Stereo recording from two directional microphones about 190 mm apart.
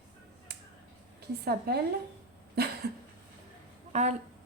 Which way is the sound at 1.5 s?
55° right (ahead or behind).